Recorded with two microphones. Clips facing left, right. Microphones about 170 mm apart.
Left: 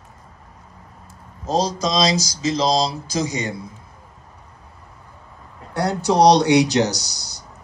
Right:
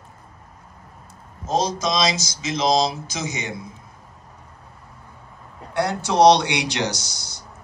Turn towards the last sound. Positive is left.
turn(degrees=40)  # may be behind; listen again after turning